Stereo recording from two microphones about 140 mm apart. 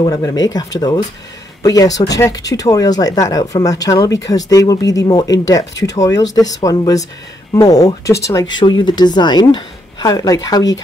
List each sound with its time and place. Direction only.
0.0 s speech: 25° left (ahead or behind)